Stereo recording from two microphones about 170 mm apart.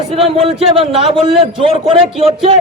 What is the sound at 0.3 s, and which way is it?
A man's voice, 35° right (ahead or behind).